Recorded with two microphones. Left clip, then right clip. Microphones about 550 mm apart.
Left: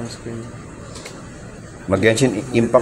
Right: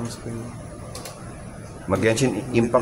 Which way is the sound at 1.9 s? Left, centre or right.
Right.